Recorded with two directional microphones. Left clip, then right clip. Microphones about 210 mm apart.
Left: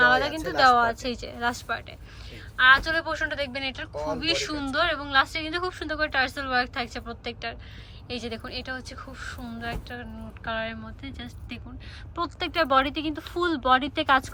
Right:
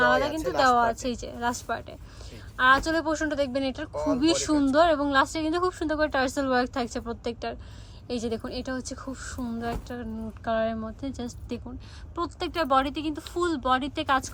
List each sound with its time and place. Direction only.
0.0 s a sound: 15° right (ahead or behind)
0.3 s a woman's voice: 15° right (ahead or behind)
12.1 s speech: 10° right (ahead or behind)